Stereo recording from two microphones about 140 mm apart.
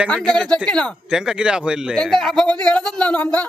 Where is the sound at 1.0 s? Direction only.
5° right (ahead or behind).